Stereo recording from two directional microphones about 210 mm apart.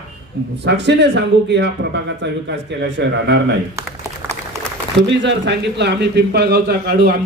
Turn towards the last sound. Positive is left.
turn(degrees=-50)  # may be behind; listen again after turning